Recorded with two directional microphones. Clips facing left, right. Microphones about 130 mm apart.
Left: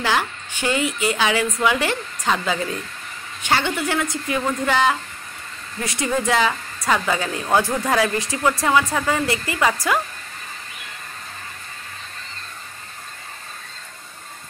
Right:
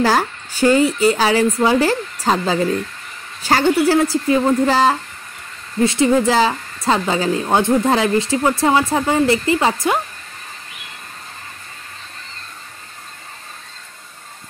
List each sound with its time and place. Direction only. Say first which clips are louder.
0.0 s speech: right 6 dB; 40° right (ahead or behind)